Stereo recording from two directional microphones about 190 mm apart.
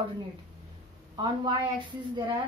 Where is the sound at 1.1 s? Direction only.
25° right (ahead or behind).